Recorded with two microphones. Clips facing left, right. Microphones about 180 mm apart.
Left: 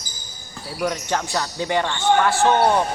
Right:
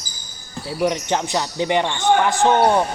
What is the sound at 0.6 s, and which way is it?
Speech, 20° right (ahead or behind).